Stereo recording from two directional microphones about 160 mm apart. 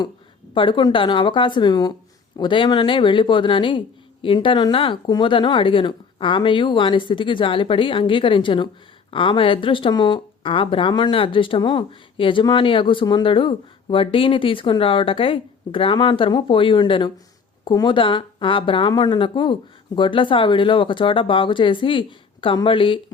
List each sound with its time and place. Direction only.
0.5 s a woman's voice: 30° left (ahead or behind)